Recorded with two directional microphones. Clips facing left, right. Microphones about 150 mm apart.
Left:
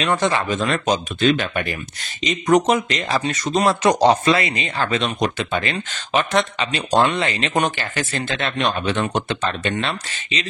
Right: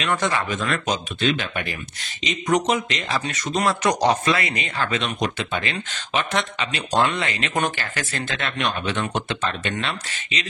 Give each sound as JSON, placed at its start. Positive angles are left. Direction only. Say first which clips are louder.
{"t": 0.0, "sound": "speech", "louder": "left 3 dB", "side_deg": 30}